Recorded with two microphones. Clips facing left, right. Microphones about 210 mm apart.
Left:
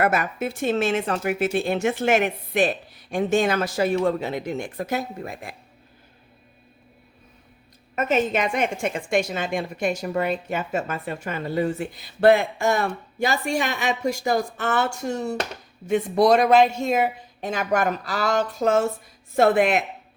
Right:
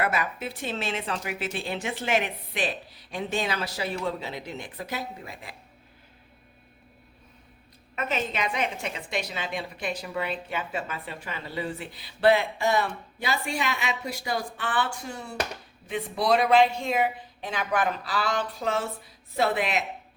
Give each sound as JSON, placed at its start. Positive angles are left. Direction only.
{"t": 0.0, "sound": "speech", "side_deg": 45}
{"t": 7.9, "sound": "speech", "side_deg": 45}